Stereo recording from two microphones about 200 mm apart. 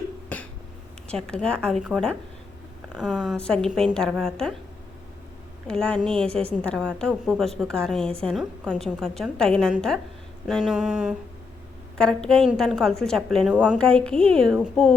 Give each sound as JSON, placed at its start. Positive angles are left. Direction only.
{"t": 0.3, "sound": "a sound", "side_deg": 5}
{"t": 1.0, "sound": "a woman's voice", "side_deg": 5}
{"t": 5.6, "sound": "a woman's voice", "side_deg": 5}
{"t": 13.8, "sound": "a woman's voice", "side_deg": 5}